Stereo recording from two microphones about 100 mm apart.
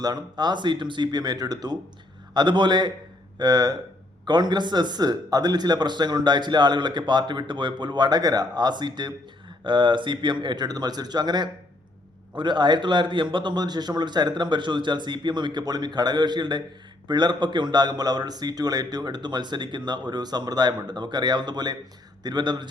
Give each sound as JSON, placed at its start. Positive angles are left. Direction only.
{"t": 0.0, "sound": "a man's voice", "side_deg": -45}